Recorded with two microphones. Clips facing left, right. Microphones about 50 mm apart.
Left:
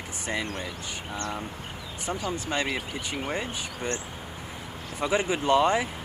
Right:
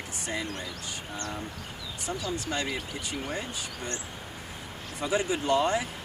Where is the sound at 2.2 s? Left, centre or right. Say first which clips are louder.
Left 3 dB; left.